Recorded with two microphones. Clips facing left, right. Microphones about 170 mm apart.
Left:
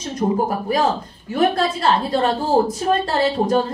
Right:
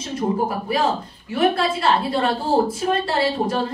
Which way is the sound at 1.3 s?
40° left (ahead or behind).